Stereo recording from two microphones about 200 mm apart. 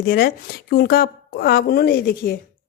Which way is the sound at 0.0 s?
50° left (ahead or behind).